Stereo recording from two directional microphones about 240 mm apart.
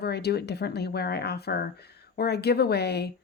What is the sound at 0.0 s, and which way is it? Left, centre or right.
A woman's voice, left.